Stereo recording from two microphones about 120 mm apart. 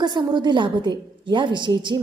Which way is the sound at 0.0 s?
40° right (ahead or behind).